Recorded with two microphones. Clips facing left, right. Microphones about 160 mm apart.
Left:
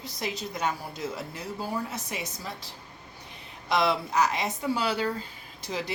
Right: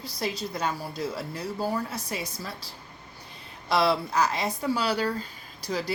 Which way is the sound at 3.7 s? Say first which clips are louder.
Right 1 dB; 30° right (ahead or behind).